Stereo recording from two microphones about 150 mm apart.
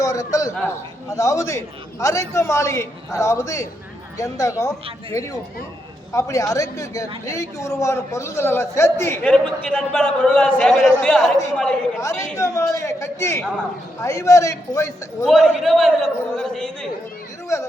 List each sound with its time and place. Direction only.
0.0 s a man's voice: 25° left (ahead or behind)
9.2 s a man's voice: 5° left (ahead or behind)
11.9 s a man's voice: 20° left (ahead or behind)
15.2 s a man's voice: centre (ahead or behind)